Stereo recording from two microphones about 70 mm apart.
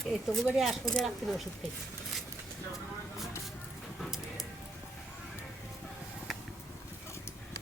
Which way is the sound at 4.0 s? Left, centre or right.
Centre.